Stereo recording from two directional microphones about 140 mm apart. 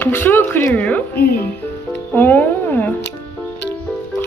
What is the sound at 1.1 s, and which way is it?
Speech, 90° left.